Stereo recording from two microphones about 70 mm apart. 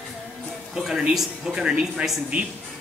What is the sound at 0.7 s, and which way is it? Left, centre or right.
Speech, centre.